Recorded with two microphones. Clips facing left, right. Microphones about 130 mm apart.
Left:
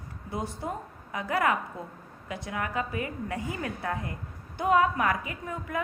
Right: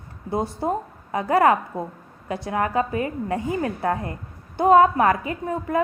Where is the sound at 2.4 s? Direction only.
35° right (ahead or behind).